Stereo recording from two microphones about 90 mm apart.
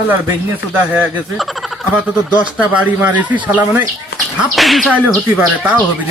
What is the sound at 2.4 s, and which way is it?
Speech, 15° right (ahead or behind).